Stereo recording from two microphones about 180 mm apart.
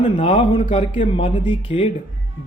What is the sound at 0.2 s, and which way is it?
A man's voice, 30° left (ahead or behind).